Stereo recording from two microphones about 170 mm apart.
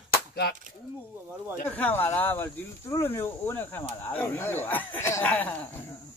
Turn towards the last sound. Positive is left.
turn(degrees=10)  # may be behind; listen again after turning